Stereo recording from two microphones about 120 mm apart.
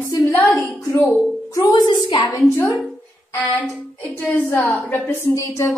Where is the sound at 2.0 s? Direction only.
40° left (ahead or behind).